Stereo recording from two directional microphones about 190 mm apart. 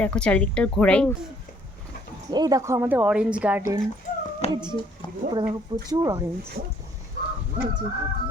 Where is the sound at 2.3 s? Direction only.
20° right (ahead or behind).